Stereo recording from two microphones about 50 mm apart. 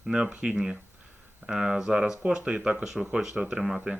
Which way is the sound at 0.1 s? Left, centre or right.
Centre.